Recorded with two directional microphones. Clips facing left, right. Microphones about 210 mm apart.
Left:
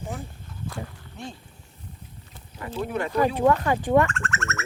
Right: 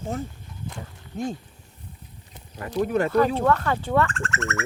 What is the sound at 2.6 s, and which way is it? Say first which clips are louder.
Speech: right 5 dB; 40° right (ahead or behind).